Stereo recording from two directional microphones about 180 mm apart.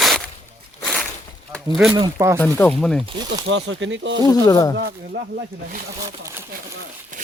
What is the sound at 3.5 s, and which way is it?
Speech, 90° right.